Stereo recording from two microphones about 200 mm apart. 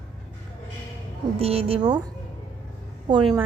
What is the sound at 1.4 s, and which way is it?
Speech, 30° right (ahead or behind).